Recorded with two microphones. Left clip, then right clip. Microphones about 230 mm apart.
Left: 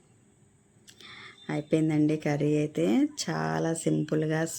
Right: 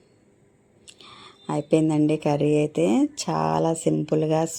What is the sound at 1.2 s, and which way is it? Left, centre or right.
Speech, centre.